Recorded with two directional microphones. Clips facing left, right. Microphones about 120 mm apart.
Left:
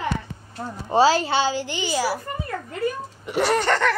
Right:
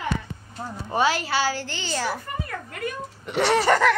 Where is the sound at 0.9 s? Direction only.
30° left (ahead or behind); by 2.2 s 10° left (ahead or behind).